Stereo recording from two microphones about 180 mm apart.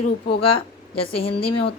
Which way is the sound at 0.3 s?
30° left (ahead or behind).